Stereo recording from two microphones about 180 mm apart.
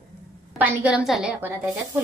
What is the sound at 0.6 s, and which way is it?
A woman's voice, 10° right (ahead or behind).